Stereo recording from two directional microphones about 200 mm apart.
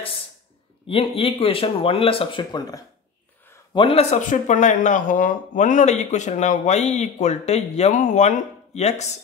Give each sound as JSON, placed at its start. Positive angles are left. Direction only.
{"t": 0.8, "sound": "speech", "side_deg": 25}